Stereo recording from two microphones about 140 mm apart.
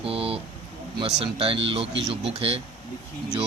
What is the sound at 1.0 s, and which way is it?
Speech, 45° right (ahead or behind).